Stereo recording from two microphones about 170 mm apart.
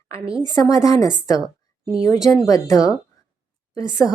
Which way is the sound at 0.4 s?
20° left (ahead or behind).